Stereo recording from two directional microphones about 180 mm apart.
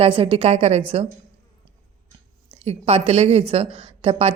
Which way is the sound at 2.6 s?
35° right (ahead or behind).